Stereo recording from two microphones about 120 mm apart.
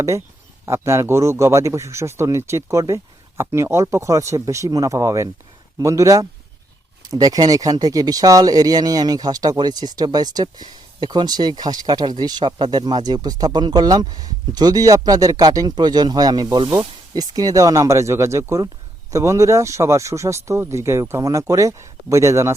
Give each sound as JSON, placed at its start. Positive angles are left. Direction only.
{"t": 0.6, "sound": "a man's voice", "side_deg": -20}